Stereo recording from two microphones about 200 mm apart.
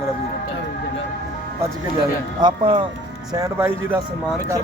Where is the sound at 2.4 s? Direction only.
25° right (ahead or behind).